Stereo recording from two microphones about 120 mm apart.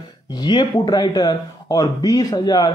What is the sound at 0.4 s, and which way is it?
Speech, 40° left (ahead or behind).